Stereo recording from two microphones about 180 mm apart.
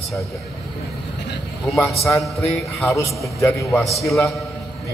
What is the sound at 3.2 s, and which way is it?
Speech, 15° left (ahead or behind).